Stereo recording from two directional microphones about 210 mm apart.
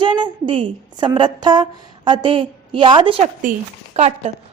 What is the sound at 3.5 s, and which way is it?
Speech, 40° right (ahead or behind).